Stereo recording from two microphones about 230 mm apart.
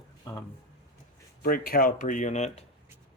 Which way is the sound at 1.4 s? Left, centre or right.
Left.